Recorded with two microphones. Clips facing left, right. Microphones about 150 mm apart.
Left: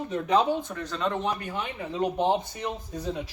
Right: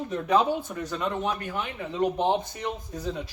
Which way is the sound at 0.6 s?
10° right (ahead or behind).